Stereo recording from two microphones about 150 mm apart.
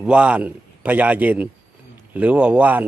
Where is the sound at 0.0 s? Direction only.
5° right (ahead or behind).